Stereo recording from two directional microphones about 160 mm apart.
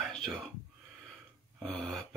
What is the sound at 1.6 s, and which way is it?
Speech, 5° left (ahead or behind).